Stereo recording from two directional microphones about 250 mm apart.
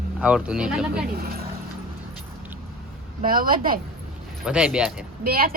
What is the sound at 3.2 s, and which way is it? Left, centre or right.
Speech, right.